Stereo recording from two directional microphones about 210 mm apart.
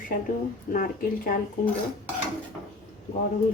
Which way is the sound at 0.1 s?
45° left (ahead or behind).